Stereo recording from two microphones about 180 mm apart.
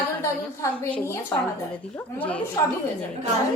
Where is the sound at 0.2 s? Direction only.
10° left (ahead or behind).